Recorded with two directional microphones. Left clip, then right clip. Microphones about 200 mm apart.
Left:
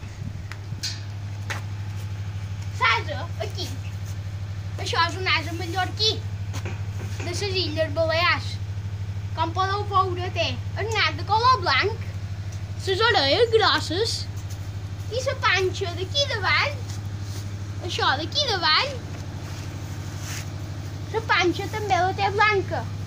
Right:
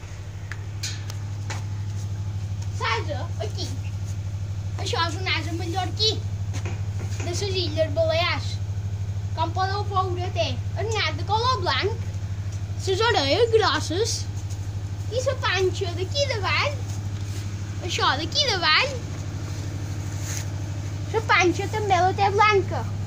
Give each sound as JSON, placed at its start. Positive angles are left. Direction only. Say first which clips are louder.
{"t": 4.7, "sound": "a woman's voice", "louder": "left 3 dB", "side_deg": 0}
{"t": 12.8, "sound": "a woman's voice", "louder": "left 1 dB", "side_deg": -25}
{"t": 15.0, "sound": "a child's voice", "louder": "left 2 dB", "side_deg": -15}
{"t": 16.2, "sound": "a woman's voice", "louder": "left 2 dB", "side_deg": -25}
{"t": 17.8, "sound": "speech", "louder": "even", "side_deg": -30}
{"t": 21.1, "sound": "speech", "louder": "right 2 dB", "side_deg": 10}